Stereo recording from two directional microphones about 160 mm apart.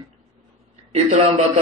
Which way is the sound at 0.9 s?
40° right (ahead or behind).